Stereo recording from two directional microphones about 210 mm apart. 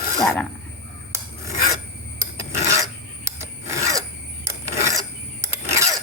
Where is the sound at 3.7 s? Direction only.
15° right (ahead or behind).